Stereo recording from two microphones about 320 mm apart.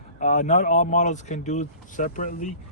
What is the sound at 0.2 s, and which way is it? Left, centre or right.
Speech, left.